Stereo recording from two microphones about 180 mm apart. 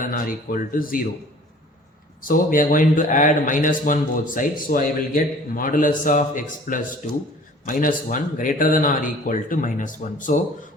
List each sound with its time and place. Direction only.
0.0 s a man's voice: 50° left (ahead or behind)
2.2 s a man's voice: 50° left (ahead or behind)